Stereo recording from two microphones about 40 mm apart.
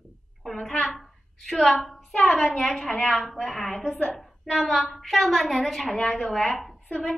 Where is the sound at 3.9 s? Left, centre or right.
Centre.